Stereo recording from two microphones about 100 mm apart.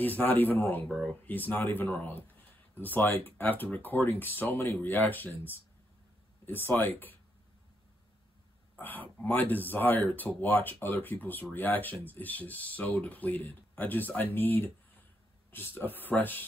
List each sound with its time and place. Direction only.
0.0 s speech: 20° left (ahead or behind)
8.7 s speech: 20° left (ahead or behind)